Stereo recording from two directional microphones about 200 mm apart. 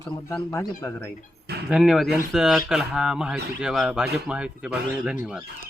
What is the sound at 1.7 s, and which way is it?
Speech, centre (ahead or behind).